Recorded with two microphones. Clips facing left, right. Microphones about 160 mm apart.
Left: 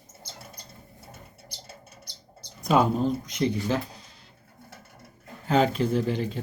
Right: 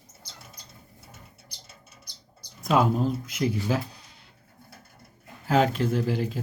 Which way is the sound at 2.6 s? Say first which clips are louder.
Left 1 dB; centre (ahead or behind).